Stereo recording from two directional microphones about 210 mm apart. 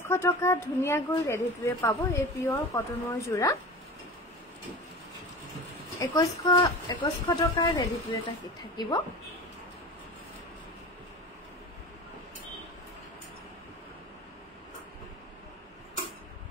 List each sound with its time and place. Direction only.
0.1 s a woman's voice: 10° left (ahead or behind)
5.9 s a woman's voice: 20° left (ahead or behind)